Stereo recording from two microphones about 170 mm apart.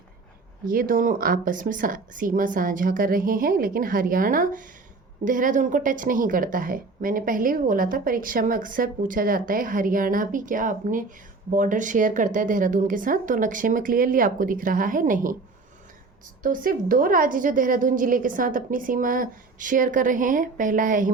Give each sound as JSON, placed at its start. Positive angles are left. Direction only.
{"t": 0.7, "sound": "a woman's voice", "side_deg": -55}
{"t": 16.4, "sound": "a woman's voice", "side_deg": -55}